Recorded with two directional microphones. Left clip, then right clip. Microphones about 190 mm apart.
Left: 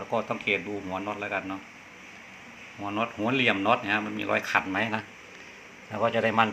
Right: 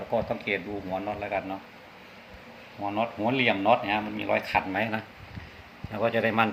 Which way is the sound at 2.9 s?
Centre (ahead or behind).